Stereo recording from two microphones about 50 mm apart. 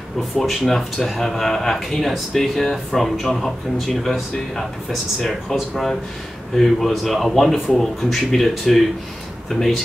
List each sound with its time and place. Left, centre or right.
0.4 s a man's voice: centre